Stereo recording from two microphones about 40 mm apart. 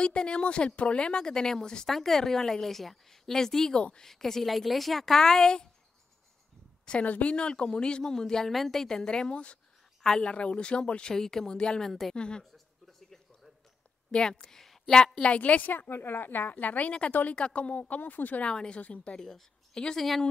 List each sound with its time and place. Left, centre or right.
0.0 s speech: left
1.9 s a woman's voice: centre
7.1 s a woman's voice: left
7.3 s a woman's voice: left
11.8 s a woman's voice: centre
12.2 s speech: left
12.5 s a sound: centre
14.1 s a woman's voice: centre
15.2 s a woman's voice: left
15.9 s a woman's voice: left
18.4 s a woman's voice: left
19.1 s a woman's voice: centre